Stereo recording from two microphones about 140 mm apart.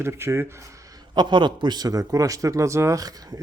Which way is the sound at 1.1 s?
30° right (ahead or behind).